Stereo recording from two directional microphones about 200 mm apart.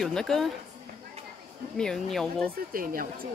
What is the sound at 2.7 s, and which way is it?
Speech, 45° right (ahead or behind).